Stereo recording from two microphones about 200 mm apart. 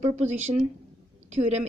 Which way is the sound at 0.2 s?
35° right (ahead or behind).